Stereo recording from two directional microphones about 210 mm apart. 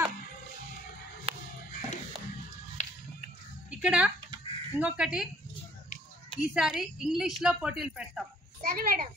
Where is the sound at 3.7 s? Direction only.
5° right (ahead or behind).